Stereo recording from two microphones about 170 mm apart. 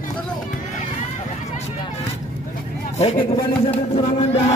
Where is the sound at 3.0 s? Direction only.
40° left (ahead or behind).